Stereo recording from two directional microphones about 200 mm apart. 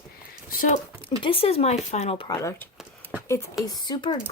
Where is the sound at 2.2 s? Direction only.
20° left (ahead or behind).